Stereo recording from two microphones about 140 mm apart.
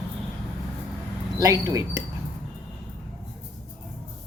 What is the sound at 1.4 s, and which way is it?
Speech, 25° right (ahead or behind).